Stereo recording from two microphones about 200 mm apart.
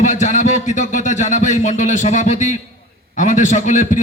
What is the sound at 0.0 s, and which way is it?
A man's voice, 40° left (ahead or behind).